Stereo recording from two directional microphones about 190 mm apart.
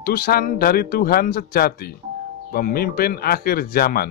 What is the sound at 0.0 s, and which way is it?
Speech, 50° left (ahead or behind).